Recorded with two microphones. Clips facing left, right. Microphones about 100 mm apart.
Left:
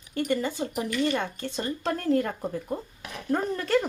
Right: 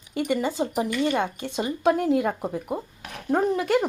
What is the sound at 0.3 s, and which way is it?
Speech, 15° right (ahead or behind).